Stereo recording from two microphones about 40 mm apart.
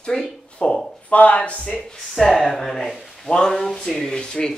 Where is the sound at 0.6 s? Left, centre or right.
Left.